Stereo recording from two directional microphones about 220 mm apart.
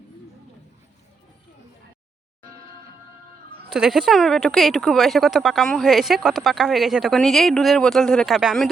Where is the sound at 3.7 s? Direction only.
Centre (ahead or behind).